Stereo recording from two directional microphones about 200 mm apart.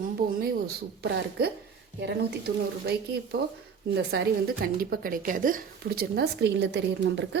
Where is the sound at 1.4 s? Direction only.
50° right (ahead or behind).